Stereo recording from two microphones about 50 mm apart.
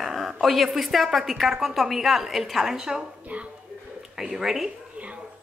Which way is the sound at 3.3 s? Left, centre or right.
Right.